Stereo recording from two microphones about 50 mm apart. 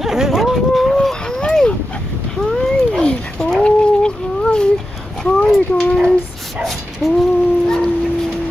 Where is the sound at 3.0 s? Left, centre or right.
Centre.